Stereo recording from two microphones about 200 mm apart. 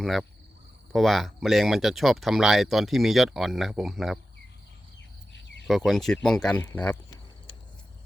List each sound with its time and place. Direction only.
0.0 s speech: centre (ahead or behind)
5.3 s cricket: 60° left (ahead or behind)
5.6 s speech: centre (ahead or behind)